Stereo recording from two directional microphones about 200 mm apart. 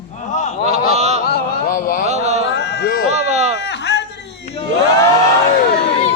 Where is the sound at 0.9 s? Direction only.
35° right (ahead or behind).